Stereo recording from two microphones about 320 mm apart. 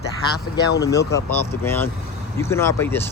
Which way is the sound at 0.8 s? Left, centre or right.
Centre.